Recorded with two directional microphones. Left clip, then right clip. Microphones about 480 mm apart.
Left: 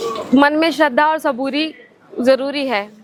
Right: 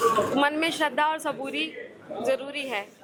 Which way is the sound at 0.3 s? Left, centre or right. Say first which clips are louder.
Left 11 dB; left.